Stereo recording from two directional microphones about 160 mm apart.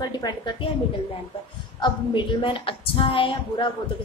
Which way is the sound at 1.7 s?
30° left (ahead or behind).